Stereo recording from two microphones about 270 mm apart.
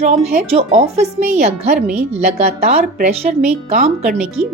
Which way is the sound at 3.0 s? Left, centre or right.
Right.